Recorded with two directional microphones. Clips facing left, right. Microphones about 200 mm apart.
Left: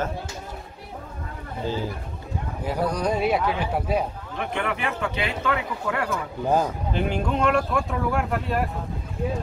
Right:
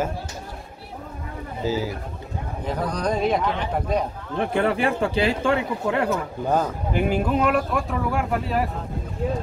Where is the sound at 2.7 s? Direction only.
10° left (ahead or behind).